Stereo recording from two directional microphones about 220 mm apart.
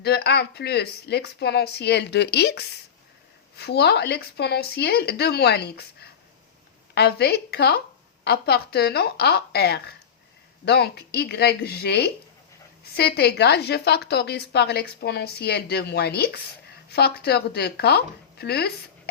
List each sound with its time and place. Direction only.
0.0 s a woman's voice: 45° left (ahead or behind)